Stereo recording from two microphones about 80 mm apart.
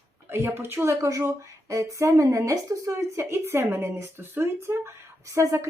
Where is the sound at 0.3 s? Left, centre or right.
Right.